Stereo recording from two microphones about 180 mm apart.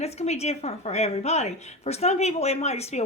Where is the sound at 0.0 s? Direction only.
35° left (ahead or behind).